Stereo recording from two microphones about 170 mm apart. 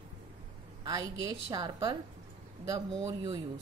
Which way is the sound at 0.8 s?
20° right (ahead or behind).